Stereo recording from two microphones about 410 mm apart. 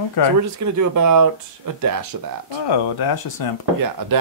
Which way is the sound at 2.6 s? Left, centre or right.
Left.